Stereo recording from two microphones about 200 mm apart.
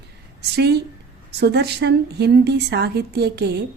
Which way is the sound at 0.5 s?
55° right (ahead or behind).